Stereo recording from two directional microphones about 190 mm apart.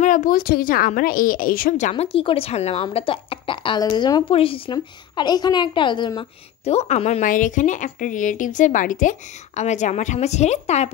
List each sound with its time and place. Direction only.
0.0 s a woman's voice: 45° left (ahead or behind)